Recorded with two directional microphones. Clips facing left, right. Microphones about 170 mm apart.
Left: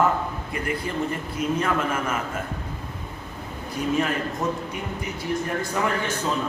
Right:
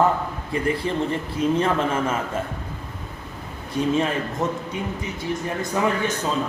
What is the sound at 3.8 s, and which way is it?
Speech, 30° right (ahead or behind).